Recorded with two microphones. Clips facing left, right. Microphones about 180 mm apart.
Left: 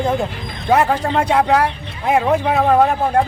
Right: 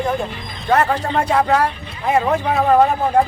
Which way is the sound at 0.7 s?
10° left (ahead or behind).